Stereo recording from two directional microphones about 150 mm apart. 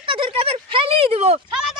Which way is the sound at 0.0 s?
35° right (ahead or behind).